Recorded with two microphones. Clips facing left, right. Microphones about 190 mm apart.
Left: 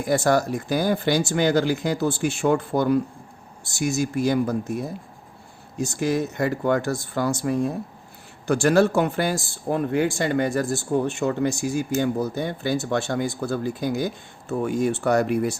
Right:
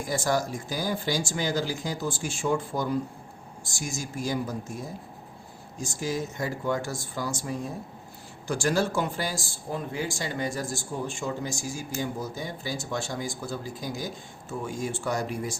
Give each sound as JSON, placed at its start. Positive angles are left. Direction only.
{"t": 0.0, "sound": "speech", "side_deg": 65}